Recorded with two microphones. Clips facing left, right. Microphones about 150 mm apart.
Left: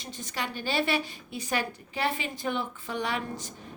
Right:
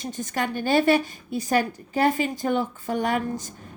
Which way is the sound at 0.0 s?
50° right (ahead or behind).